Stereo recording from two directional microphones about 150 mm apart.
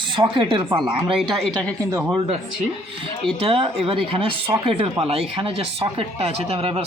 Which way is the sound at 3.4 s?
35° right (ahead or behind).